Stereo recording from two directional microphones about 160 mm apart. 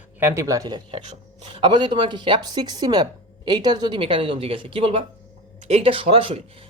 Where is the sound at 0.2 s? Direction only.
15° right (ahead or behind).